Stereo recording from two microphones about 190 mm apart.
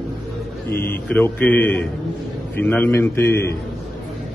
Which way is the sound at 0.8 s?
10° left (ahead or behind).